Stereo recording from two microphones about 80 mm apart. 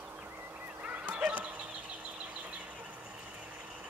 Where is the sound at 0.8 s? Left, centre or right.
Centre.